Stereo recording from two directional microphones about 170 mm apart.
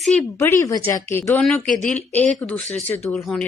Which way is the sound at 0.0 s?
5° left (ahead or behind).